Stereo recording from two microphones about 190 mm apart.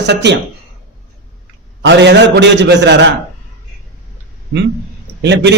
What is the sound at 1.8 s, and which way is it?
A man's voice, 65° right (ahead or behind).